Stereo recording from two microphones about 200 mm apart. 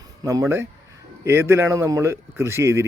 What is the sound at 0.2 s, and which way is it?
Speech, 15° right (ahead or behind).